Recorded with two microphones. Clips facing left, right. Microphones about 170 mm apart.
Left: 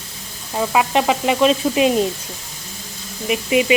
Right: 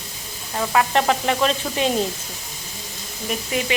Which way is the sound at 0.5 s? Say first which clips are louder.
Left 2 dB; 15° left (ahead or behind).